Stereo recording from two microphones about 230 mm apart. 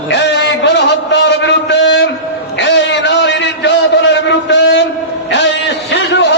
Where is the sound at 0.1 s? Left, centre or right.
Left.